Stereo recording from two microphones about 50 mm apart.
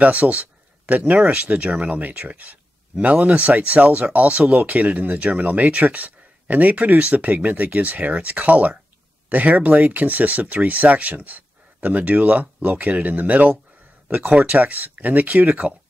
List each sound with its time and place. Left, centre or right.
0.0 s speech: right